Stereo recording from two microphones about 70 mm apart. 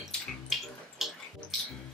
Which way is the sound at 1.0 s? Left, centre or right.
Centre.